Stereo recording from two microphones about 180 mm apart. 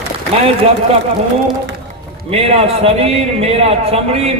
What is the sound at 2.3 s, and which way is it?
A man's voice, 35° right (ahead or behind).